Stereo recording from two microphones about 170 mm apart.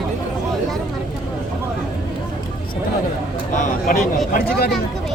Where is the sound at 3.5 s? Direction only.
55° left (ahead or behind).